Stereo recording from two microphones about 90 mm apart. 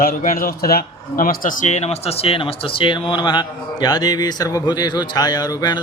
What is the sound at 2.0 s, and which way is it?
A man's voice, 90° left.